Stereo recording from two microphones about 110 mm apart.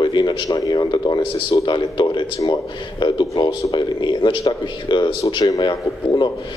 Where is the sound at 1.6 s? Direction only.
45° left (ahead or behind).